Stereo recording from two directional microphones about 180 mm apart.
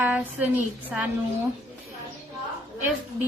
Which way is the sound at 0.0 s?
10° right (ahead or behind).